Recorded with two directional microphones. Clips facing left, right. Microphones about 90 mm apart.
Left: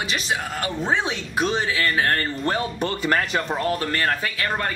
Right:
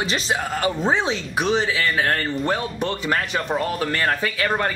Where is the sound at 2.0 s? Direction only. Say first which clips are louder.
Right 1 dB; 10° right (ahead or behind).